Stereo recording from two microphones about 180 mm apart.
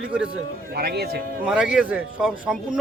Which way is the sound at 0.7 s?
65° right (ahead or behind).